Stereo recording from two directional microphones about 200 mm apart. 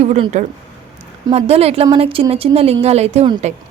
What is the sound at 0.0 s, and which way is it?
A woman's voice, 35° right (ahead or behind).